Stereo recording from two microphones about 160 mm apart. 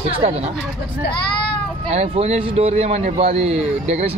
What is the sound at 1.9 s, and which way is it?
A man's voice, 40° right (ahead or behind).